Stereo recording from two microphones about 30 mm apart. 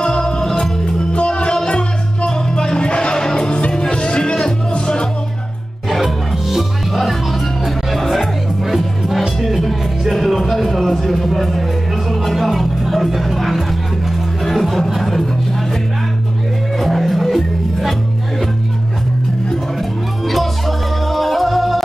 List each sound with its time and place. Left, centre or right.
0.0 s music: left
1.1 s music: left
5.9 s music: centre
16.7 s music: centre
20.2 s music: centre